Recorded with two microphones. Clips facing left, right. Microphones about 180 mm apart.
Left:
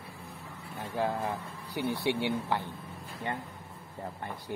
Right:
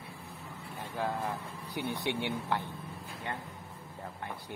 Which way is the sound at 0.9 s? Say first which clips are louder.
Left 3 dB; 5° left (ahead or behind).